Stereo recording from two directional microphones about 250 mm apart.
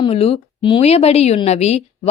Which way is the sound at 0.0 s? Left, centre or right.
Left.